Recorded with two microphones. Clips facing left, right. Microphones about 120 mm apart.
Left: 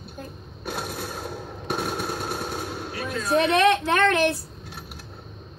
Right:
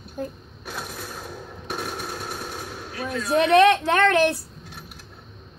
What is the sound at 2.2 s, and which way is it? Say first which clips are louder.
Machine gun: left 3 dB; 55° left (ahead or behind).